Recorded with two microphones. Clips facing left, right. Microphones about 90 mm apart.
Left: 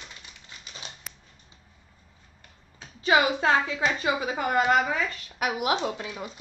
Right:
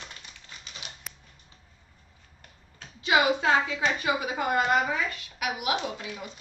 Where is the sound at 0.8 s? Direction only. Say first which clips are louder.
Left 3 dB; 30° left (ahead or behind).